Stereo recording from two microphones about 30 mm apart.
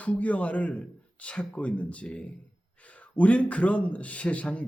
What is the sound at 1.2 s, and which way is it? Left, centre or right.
Speech, left.